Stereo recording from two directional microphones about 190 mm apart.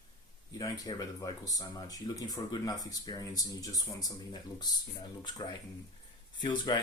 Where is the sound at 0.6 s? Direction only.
20° left (ahead or behind).